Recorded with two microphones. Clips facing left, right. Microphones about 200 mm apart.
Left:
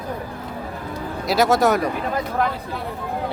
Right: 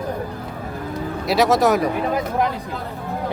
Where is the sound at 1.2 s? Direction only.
Centre (ahead or behind).